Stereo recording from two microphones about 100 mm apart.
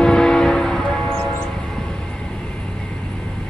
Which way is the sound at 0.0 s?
5° left (ahead or behind).